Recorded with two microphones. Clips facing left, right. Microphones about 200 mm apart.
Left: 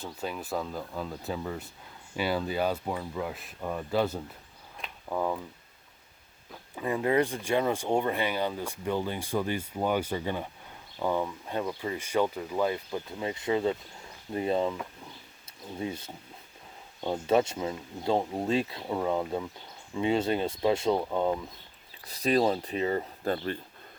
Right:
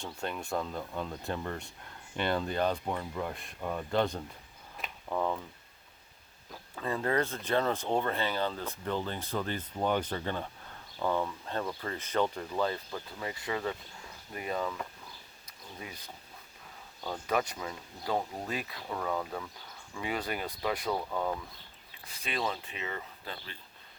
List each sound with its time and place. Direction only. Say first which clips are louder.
0.0 s speech: left 2 dB; 5° left (ahead or behind)
6.7 s speech: left 4 dB; 15° left (ahead or behind)
15.8 s speech: left 12 dB; 30° left (ahead or behind)
22.0 s speech: left 10 dB; 40° left (ahead or behind)